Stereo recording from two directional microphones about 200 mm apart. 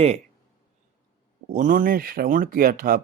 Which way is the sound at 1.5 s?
40° right (ahead or behind).